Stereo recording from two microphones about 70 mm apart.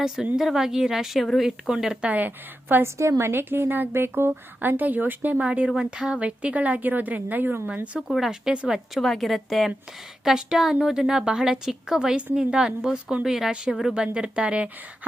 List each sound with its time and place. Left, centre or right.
0.3 s a woman's voice: centre
2.0 s a woman's voice: right
2.8 s a woman's voice: right
7.9 s a woman's voice: centre
9.0 s a woman's voice: centre